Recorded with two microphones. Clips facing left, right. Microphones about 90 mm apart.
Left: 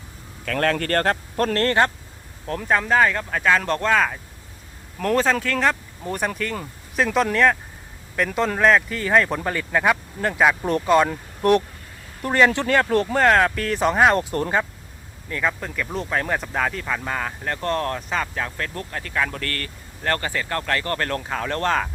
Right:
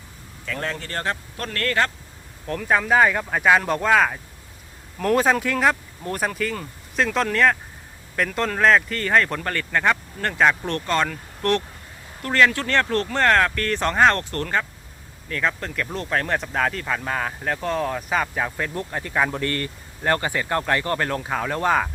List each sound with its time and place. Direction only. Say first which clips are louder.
0.4 s speech: left 7 dB; 65° left (ahead or behind)
1.1 s speech: left 9 dB; 40° left (ahead or behind); by 1.9 s 25° left (ahead or behind)
2.5 s speech: even; centre (ahead or behind)